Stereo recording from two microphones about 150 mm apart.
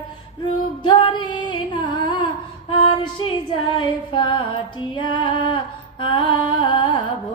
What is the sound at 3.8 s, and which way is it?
Female singing, 30° left (ahead or behind).